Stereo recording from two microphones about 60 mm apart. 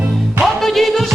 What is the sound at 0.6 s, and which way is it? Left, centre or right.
Music, centre.